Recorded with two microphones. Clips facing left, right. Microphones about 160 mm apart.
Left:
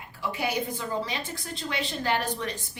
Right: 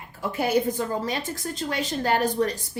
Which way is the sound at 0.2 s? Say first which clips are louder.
Right 6 dB; 45° right (ahead or behind).